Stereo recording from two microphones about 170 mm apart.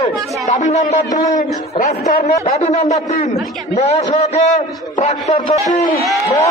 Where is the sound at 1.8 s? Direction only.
55° left (ahead or behind).